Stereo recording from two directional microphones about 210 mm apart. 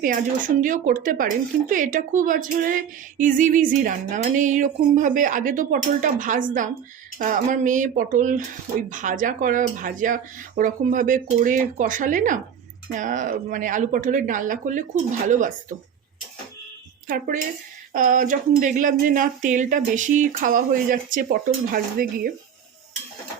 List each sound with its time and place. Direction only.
0.6 s speech: 40° right (ahead or behind)
17.1 s speech: 40° right (ahead or behind)
21.7 s stir: 45° right (ahead or behind)